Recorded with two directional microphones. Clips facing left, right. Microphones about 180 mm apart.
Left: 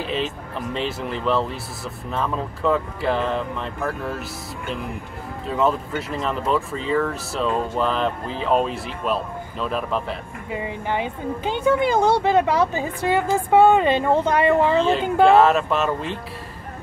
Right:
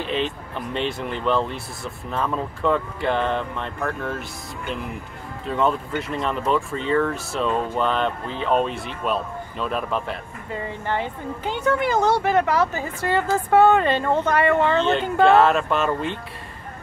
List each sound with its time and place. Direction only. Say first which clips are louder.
0.0 s speech: even; centre (ahead or behind)
5.5 s speech: left 1 dB; centre (ahead or behind)
10.5 s speech: left 1 dB; 10° left (ahead or behind)
14.6 s speech: left 1 dB; 5° left (ahead or behind)